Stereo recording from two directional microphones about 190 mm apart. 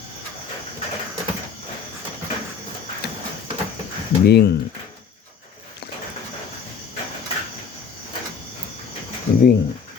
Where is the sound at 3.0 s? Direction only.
55° left (ahead or behind).